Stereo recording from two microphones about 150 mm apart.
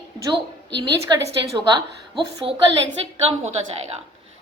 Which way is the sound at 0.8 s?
30° right (ahead or behind).